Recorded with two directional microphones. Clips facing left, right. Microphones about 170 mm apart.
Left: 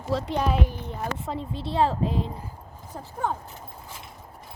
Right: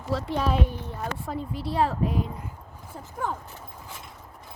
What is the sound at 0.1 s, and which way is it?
Speech, 20° left (ahead or behind).